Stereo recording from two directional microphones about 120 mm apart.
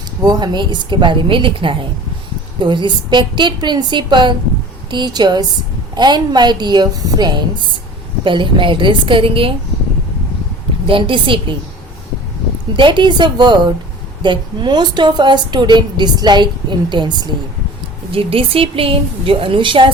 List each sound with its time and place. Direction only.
0.3 s a woman's voice: 35° right (ahead or behind)
10.8 s a woman's voice: 45° right (ahead or behind)
12.7 s a woman's voice: 40° right (ahead or behind)
18.1 s a woman's voice: 50° right (ahead or behind)